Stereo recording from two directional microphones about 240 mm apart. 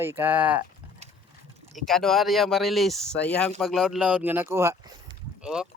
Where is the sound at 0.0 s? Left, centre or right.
Centre.